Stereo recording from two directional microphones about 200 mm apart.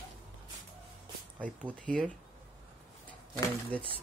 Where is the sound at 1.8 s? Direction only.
5° left (ahead or behind).